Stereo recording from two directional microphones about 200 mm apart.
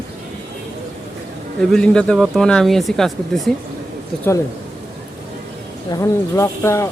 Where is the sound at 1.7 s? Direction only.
5° left (ahead or behind).